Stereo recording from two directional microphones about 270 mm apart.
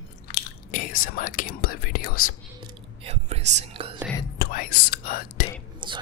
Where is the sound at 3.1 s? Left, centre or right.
Right.